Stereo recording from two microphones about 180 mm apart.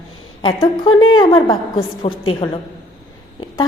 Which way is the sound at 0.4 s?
25° left (ahead or behind).